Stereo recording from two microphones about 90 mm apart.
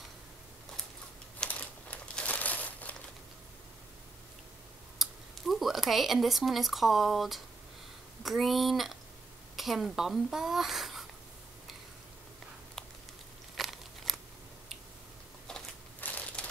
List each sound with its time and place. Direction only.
1.5 s crumpling: 15° left (ahead or behind)
4.9 s a child's voice: centre (ahead or behind)
13.6 s crunch: centre (ahead or behind)
16.0 s crushing: 15° left (ahead or behind)